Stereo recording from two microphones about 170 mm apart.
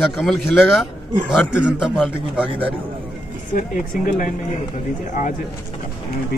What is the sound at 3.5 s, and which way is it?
Speech, 55° left (ahead or behind).